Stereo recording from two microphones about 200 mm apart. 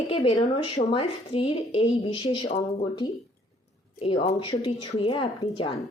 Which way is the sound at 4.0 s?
30° left (ahead or behind).